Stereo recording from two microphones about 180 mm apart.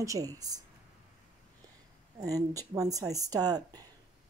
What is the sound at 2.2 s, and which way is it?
Speech, 20° right (ahead or behind).